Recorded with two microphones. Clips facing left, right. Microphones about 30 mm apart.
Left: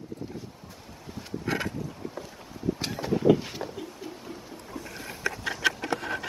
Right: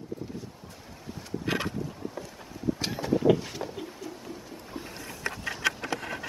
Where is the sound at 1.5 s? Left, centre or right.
Right.